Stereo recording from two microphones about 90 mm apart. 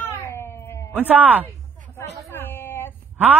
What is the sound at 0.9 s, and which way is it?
Speech, 20° right (ahead or behind).